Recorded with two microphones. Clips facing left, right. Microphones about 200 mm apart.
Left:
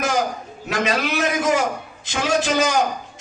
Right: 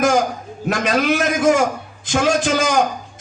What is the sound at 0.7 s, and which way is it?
A man's voice, 50° right (ahead or behind).